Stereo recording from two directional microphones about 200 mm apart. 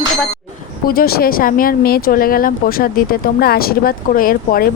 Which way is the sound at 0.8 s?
50° left (ahead or behind).